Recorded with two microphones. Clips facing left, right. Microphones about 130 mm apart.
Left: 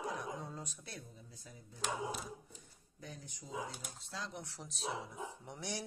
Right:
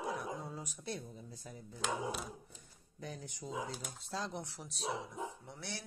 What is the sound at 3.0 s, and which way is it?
Speech, 80° right.